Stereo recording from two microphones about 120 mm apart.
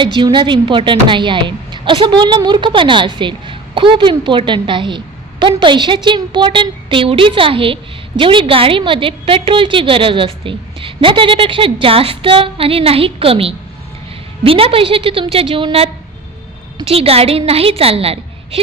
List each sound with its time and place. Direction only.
0.0 s a woman's voice: 40° right (ahead or behind)